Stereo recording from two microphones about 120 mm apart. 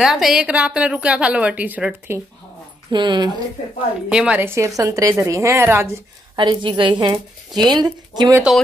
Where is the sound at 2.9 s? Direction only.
40° right (ahead or behind).